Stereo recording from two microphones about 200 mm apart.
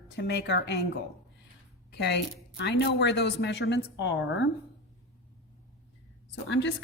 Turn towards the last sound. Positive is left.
turn(degrees=65)  # may be behind; listen again after turning